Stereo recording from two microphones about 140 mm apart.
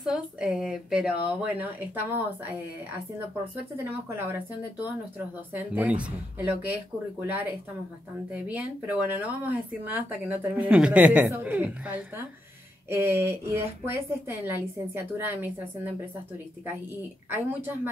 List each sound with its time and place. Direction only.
0.0 s a woman's voice: 5° right (ahead or behind)
5.5 s a woman's voice: 10° right (ahead or behind)
17.3 s a woman's voice: 15° right (ahead or behind)